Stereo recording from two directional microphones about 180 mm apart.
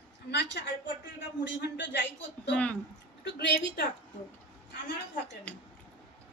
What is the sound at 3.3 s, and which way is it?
Speech, 65° left (ahead or behind).